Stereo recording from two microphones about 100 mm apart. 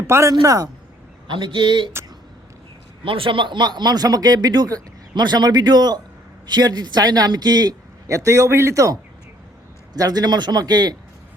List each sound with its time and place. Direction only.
0.1 s a man's voice: 30° right (ahead or behind)
1.3 s speech: 55° right (ahead or behind)
3.0 s a man's voice: 60° right (ahead or behind); by 10.9 s 45° right (ahead or behind)